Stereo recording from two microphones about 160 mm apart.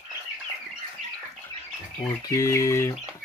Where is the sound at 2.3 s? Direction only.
20° left (ahead or behind).